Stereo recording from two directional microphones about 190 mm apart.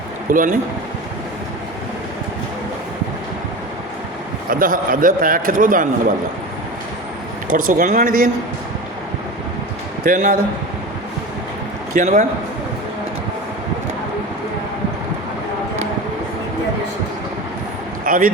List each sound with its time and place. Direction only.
0.3 s a man's voice: 45° right (ahead or behind)
4.4 s a man's voice: 50° right (ahead or behind)
7.5 s a man's voice: 45° right (ahead or behind)
10.0 s a man's voice: 45° right (ahead or behind)
11.9 s a man's voice: 40° right (ahead or behind)
18.0 s a sound: 45° right (ahead or behind)